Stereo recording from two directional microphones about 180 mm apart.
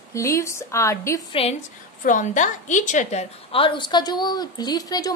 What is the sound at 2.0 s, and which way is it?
A woman's voice, 45° left (ahead or behind).